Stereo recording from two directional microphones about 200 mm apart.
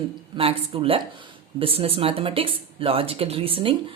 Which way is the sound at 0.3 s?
30° right (ahead or behind).